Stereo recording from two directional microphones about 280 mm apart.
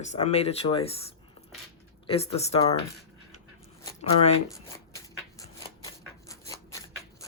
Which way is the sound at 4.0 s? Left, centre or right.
Left.